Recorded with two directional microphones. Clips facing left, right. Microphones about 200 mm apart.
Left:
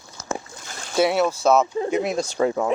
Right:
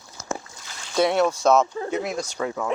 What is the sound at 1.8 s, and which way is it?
Speech, 20° left (ahead or behind).